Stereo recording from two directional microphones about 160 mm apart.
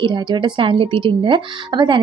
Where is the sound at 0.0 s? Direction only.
30° right (ahead or behind).